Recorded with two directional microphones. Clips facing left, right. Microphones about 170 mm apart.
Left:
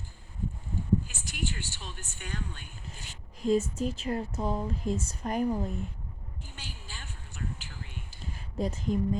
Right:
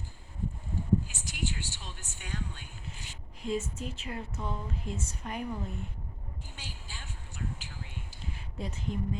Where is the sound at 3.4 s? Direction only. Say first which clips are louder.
Left 7 dB; 40° left (ahead or behind).